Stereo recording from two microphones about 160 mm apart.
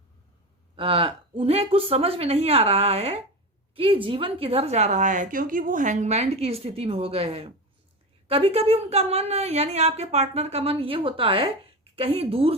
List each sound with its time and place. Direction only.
0.8 s a woman's voice: 35° right (ahead or behind)